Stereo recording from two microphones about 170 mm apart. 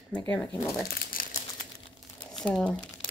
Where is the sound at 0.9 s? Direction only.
55° left (ahead or behind).